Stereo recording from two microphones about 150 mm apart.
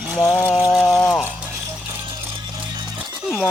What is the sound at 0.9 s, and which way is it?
Speech, 10° left (ahead or behind).